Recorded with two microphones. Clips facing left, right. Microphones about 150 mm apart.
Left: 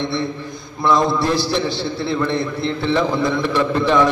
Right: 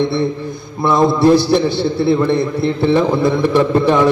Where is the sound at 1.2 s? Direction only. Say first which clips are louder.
Right 8 dB; 55° right (ahead or behind).